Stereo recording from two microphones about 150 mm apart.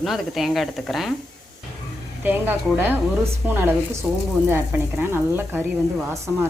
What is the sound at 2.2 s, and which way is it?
Speech, 15° right (ahead or behind).